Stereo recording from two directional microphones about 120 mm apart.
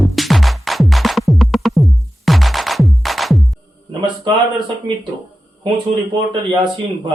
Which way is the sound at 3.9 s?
40° right (ahead or behind).